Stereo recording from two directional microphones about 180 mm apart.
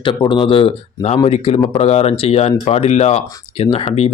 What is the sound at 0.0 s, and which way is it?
Speech, 25° left (ahead or behind).